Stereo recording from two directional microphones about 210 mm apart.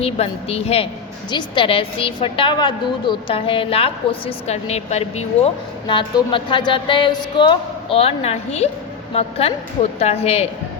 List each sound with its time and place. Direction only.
0.0 s a woman's voice: 30° left (ahead or behind)